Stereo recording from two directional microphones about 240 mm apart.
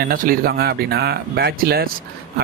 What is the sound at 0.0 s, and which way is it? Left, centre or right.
Speech, right.